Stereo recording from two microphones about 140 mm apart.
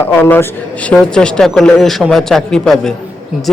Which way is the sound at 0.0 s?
15° left (ahead or behind).